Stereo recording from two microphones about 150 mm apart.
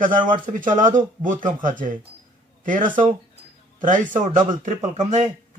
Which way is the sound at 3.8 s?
60° right (ahead or behind).